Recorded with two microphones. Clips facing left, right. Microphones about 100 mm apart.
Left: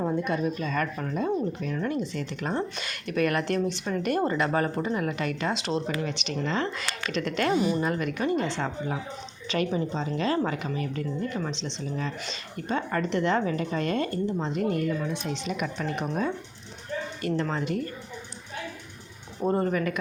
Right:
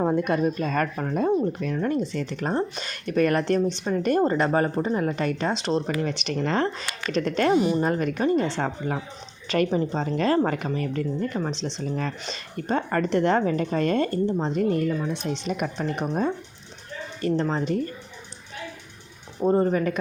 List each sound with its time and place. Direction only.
0.0 s speech: 55° right (ahead or behind); by 7.5 s 40° right (ahead or behind)
7.5 s speech: 20° right (ahead or behind)
7.8 s speech: 40° right (ahead or behind)
11.8 s speech: 50° right (ahead or behind)
17.2 s speech: 35° right (ahead or behind)
19.5 s speech: 25° right (ahead or behind)